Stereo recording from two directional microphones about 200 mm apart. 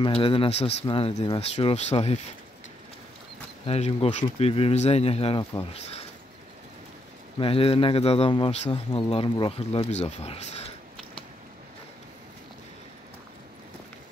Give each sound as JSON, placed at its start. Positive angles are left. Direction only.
{"t": 0.0, "sound": "speech", "side_deg": 25}
{"t": 3.6, "sound": "speech", "side_deg": 30}
{"t": 7.3, "sound": "speech", "side_deg": 25}